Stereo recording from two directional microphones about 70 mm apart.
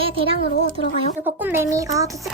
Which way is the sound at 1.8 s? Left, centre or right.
Right.